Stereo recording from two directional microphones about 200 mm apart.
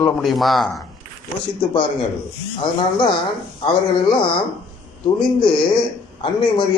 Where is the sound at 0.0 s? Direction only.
Centre (ahead or behind).